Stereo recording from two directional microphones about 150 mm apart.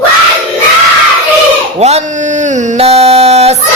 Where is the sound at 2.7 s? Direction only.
40° right (ahead or behind).